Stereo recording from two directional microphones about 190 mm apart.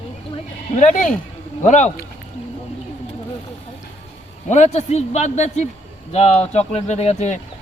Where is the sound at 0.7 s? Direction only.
40° left (ahead or behind).